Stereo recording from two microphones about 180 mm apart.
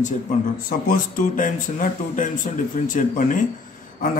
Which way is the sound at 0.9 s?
50° left (ahead or behind).